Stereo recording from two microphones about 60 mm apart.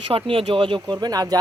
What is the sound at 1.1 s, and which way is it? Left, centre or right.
Speech, right.